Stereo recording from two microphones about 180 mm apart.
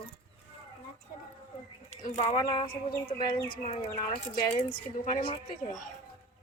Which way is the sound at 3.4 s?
55° left (ahead or behind).